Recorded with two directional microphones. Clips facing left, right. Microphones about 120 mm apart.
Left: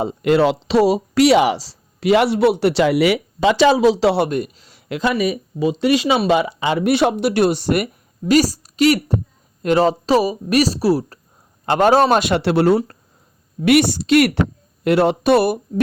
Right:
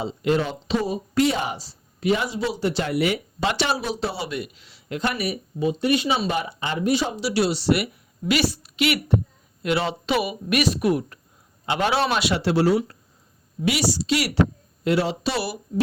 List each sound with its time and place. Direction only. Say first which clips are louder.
0.0 s speech: left 7 dB; 60° left (ahead or behind); by 4.3 s 80° left
4.3 s a man's voice: left 8 dB; 45° left (ahead or behind)
4.9 s a woman's voice: left 7 dB; 90° left; by 11.2 s 35° left (ahead or behind)
11.6 s a man's voice: left 9 dB; 45° left (ahead or behind)
12.4 s a woman's voice: left 5 dB; 65° left (ahead or behind)